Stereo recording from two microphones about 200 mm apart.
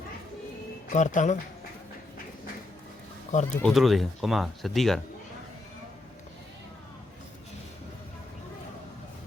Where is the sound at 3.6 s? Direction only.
Centre (ahead or behind).